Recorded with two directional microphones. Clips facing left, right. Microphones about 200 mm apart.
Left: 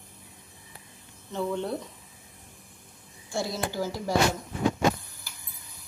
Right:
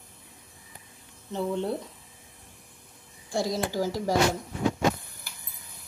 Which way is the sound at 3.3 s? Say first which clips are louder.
Right 3 dB; 35° right (ahead or behind).